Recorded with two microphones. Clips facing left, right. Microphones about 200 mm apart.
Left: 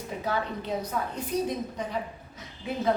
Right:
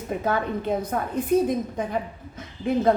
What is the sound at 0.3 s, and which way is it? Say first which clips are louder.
A woman's voice: right 5 dB; 50° right (ahead or behind).